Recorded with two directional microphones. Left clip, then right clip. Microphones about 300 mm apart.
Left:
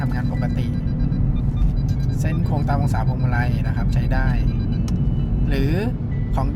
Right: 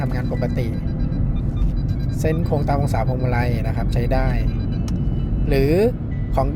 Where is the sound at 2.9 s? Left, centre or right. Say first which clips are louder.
Right 3 dB; centre.